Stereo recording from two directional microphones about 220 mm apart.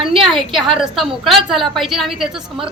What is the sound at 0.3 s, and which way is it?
A woman's voice, centre (ahead or behind).